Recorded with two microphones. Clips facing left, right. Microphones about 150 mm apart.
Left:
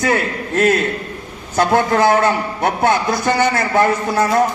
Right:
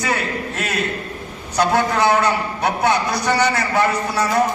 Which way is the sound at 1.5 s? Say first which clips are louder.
Left 3 dB; 50° left (ahead or behind).